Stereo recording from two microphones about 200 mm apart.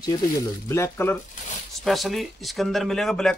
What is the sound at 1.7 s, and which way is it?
Speech, centre (ahead or behind).